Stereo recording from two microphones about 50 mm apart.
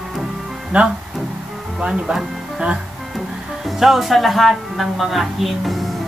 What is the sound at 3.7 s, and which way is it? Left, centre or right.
A woman's voice, centre.